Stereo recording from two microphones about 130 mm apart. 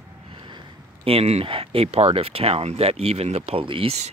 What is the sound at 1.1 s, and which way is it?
Speech, 50° right (ahead or behind).